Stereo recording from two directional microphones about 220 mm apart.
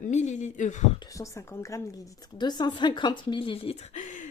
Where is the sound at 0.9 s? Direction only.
15° left (ahead or behind).